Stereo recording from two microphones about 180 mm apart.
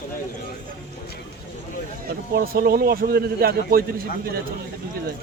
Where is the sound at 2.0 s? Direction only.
55° right (ahead or behind).